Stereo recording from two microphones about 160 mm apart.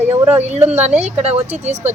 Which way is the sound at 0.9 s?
40° right (ahead or behind).